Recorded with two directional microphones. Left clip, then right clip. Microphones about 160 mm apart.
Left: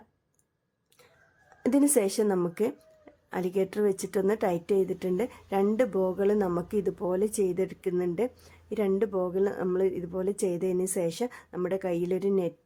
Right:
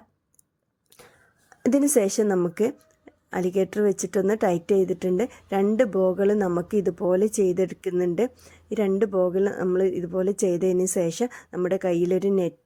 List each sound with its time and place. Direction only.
1.6 s speech: 25° right (ahead or behind)